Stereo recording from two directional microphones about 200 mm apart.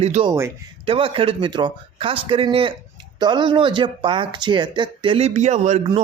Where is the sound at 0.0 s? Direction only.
30° right (ahead or behind).